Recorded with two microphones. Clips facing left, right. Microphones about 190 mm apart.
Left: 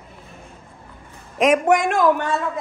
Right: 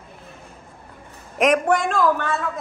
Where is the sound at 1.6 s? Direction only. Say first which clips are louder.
Left 2 dB; 20° left (ahead or behind).